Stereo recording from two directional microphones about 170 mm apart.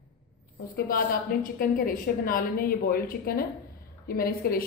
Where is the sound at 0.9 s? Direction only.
55° left (ahead or behind).